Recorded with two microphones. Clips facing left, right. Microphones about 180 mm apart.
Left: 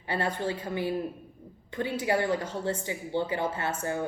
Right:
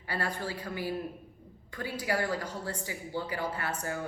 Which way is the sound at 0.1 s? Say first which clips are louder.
Left 5 dB; 25° left (ahead or behind).